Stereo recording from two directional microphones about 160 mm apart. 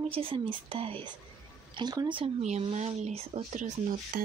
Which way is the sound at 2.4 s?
45° right (ahead or behind).